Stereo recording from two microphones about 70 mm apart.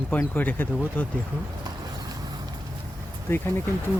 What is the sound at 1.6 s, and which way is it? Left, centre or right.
Vehicle, right.